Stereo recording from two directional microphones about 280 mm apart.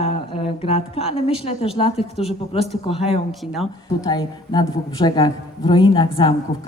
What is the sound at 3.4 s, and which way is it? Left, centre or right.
Speech, centre.